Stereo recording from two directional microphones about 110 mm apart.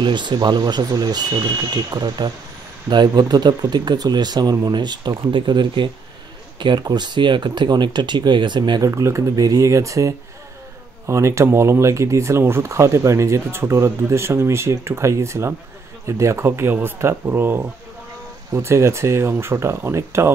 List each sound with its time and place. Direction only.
0.0 s speech: 45° right (ahead or behind); by 20.3 s 25° right (ahead or behind)